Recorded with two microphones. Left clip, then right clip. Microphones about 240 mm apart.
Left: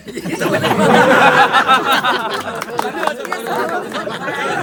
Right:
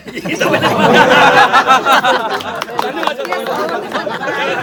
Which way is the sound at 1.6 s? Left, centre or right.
Centre.